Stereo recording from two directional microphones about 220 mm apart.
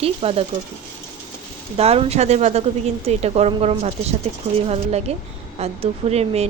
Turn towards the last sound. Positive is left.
turn(degrees=-30)  # may be behind; listen again after turning